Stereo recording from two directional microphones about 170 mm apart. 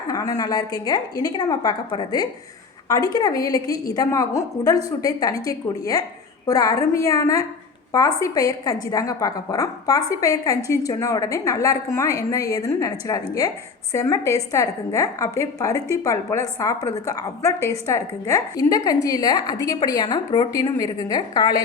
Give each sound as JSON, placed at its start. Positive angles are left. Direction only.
{"t": 0.1, "sound": "a woman's voice", "side_deg": 20}